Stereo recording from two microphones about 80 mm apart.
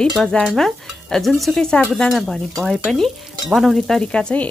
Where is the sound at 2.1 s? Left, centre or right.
Centre.